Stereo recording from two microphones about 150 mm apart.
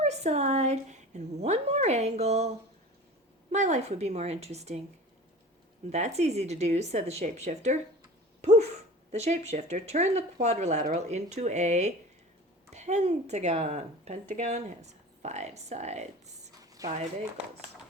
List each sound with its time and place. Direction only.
0.0 s a woman's voice: 45° right (ahead or behind)
3.5 s a woman's voice: 50° right (ahead or behind)
5.9 s a woman's voice: 50° right (ahead or behind)
8.4 s dog: 50° right (ahead or behind)
9.1 s a woman's voice: 45° right (ahead or behind)
16.6 s a sound: 25° right (ahead or behind)